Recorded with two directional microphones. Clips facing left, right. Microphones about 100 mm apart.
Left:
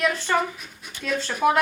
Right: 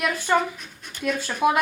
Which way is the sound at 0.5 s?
5° left (ahead or behind).